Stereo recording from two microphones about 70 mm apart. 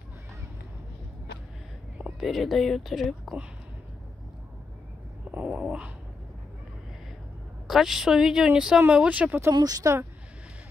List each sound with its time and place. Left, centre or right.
2.1 s speech: centre
5.3 s a sound: right
7.6 s a woman's voice: centre
8.9 s speech: centre
9.5 s speech: right